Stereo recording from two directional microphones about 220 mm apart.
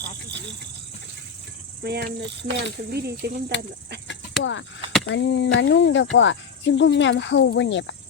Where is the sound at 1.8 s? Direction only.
45° right (ahead or behind).